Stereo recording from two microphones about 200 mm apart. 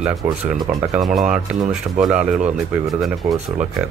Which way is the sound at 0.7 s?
5° right (ahead or behind).